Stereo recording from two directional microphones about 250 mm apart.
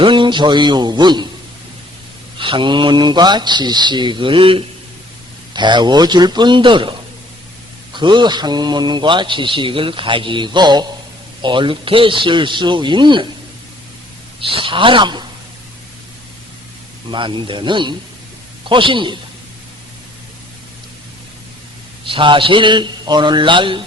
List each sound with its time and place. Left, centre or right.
0.0 s speech: centre
2.4 s speech: centre
7.9 s speech: centre
14.4 s speech: right
17.1 s speech: centre
22.0 s speech: centre